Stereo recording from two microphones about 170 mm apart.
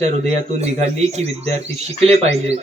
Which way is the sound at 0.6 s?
40° right (ahead or behind).